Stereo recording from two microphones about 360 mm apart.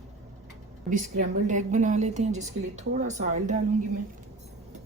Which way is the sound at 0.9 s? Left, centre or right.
Centre.